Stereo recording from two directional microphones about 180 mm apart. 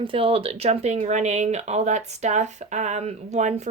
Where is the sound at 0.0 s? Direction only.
30° right (ahead or behind).